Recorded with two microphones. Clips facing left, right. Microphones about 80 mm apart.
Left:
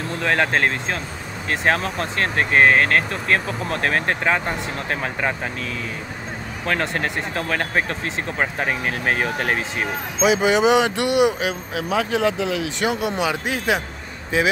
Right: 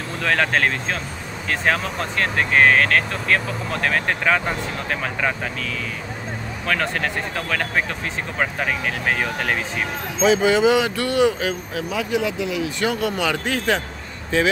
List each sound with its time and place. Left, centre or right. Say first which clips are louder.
0.2 s speech: even; left
1.7 s speech: left 1 dB; left
6.6 s speech: even; left
11.9 s speech: left 3 dB; left
13.2 s speech: even; centre